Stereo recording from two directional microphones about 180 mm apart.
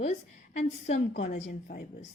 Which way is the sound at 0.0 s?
40° left (ahead or behind).